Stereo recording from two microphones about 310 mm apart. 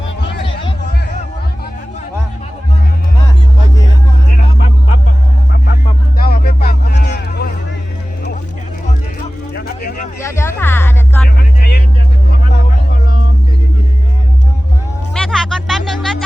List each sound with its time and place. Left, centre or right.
6.2 s music: left
9.6 s a sound: left
10.2 s music: centre
11.3 s vehicle: left
15.1 s music: centre